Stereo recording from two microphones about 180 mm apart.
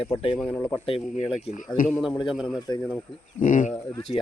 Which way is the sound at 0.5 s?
10° left (ahead or behind).